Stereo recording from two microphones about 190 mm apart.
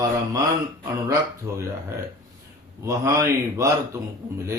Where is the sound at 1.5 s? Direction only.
15° right (ahead or behind).